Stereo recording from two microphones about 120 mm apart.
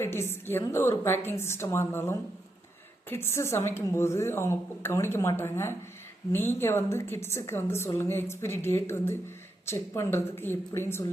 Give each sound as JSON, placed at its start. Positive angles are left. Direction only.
{"t": 0.0, "sound": "a woman's voice", "side_deg": 20}